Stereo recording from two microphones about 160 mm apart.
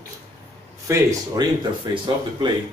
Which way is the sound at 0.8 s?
20° right (ahead or behind).